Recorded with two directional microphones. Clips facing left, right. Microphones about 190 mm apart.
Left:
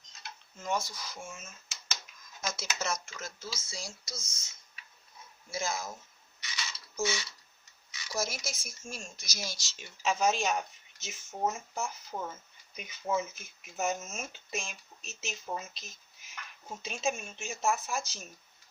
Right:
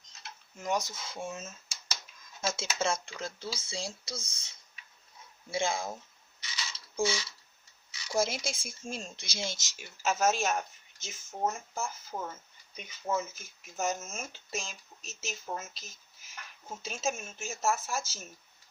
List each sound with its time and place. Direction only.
0.5 s speech: 15° right (ahead or behind)
6.7 s a sound: 30° right (ahead or behind)
7.9 s speech: 30° right (ahead or behind)
9.7 s speech: 5° right (ahead or behind)